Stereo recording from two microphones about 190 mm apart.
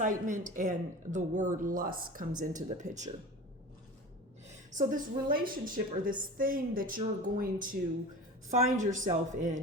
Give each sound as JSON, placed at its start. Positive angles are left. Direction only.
{"t": 0.0, "sound": "speech", "side_deg": -40}
{"t": 4.4, "sound": "a woman's voice", "side_deg": -40}